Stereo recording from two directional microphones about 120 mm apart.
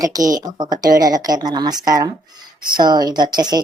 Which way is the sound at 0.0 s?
30° right (ahead or behind).